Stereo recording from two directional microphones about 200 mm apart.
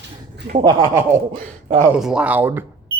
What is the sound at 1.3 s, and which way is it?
Speech, 40° right (ahead or behind).